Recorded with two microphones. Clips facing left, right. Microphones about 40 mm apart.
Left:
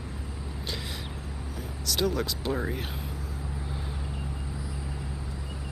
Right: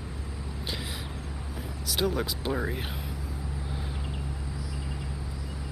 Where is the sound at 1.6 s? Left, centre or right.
Centre.